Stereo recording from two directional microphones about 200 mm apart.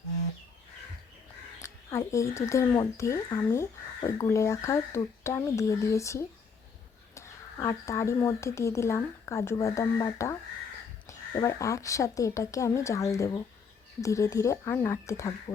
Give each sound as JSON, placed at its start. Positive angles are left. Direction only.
{"t": 1.6, "sound": "speech", "side_deg": 15}